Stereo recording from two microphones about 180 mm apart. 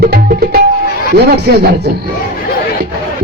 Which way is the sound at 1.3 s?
65° right (ahead or behind).